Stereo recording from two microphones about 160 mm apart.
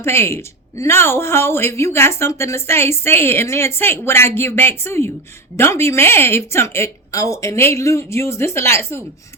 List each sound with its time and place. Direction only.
0.0 s speech: 15° left (ahead or behind)